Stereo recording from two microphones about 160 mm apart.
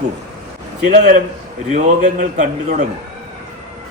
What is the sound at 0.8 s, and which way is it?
Speech, 50° right (ahead or behind).